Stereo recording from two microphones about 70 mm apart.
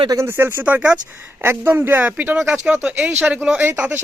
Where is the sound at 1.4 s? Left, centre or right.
Right.